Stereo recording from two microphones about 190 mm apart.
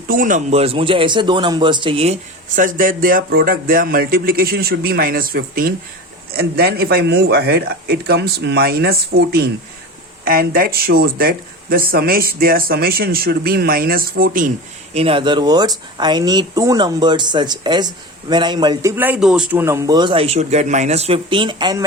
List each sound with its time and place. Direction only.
0.1 s speech: 45° right (ahead or behind); by 2.1 s 30° right (ahead or behind)
2.6 s speech: 45° right (ahead or behind)
14.9 s speech: 30° right (ahead or behind)